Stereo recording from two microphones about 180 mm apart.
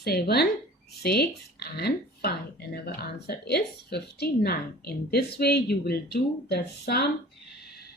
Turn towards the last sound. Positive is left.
turn(degrees=65)  # may be behind; listen again after turning